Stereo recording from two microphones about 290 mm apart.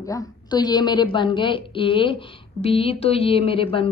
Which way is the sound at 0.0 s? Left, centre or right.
Centre.